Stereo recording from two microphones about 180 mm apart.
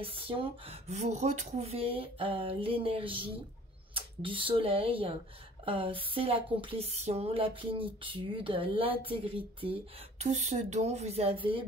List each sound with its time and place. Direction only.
0.0 s speech: 30° right (ahead or behind)